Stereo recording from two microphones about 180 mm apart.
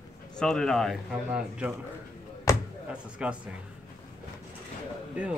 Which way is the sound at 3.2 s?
5° right (ahead or behind).